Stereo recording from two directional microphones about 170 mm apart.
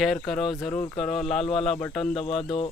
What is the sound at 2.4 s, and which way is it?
Speech, 30° left (ahead or behind).